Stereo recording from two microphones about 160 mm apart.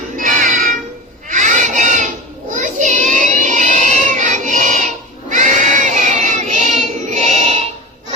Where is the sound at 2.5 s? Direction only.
50° right (ahead or behind).